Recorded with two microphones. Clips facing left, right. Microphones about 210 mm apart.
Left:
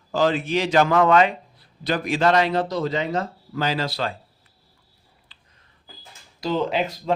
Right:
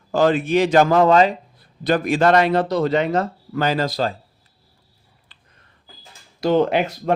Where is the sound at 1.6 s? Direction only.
50° right (ahead or behind).